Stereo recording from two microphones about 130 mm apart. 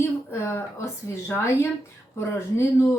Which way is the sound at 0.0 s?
20° left (ahead or behind).